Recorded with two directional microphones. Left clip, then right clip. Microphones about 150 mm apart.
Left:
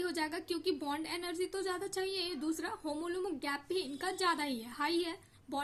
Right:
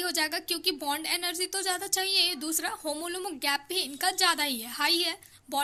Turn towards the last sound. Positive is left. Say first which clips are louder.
# right 8 dB
turn(degrees=-20)  # may be behind; listen again after turning